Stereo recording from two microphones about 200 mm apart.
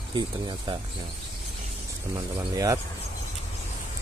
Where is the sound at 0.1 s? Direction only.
25° right (ahead or behind).